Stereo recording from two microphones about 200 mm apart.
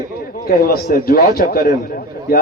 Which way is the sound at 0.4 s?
50° left (ahead or behind).